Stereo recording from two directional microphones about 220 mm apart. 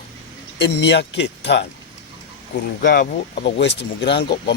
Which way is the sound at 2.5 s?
40° left (ahead or behind).